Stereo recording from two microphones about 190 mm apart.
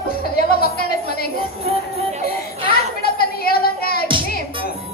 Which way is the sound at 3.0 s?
55° left (ahead or behind).